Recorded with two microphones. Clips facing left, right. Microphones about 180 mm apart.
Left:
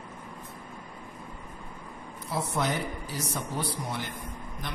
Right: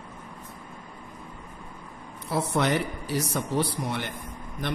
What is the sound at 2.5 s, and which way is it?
A man's voice, 70° right (ahead or behind).